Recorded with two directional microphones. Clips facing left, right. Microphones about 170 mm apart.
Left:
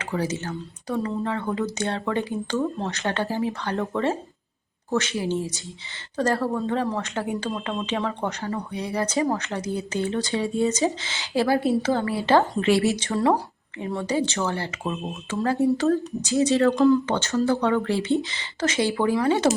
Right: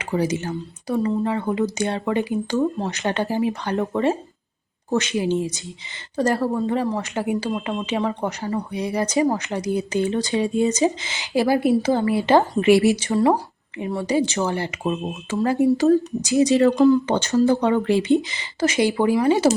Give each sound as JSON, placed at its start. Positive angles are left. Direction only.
{"t": 0.0, "sound": "speech", "side_deg": -15}